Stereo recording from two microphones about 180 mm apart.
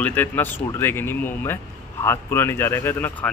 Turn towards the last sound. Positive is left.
turn(degrees=10)  # may be behind; listen again after turning